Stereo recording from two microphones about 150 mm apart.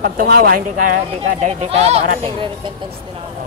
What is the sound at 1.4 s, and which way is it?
Speech, 45° right (ahead or behind).